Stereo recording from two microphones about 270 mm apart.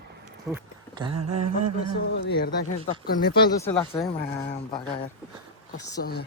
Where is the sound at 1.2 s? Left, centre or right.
Right.